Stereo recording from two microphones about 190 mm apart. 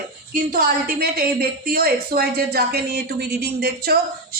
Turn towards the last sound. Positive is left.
turn(degrees=-55)  # may be behind; listen again after turning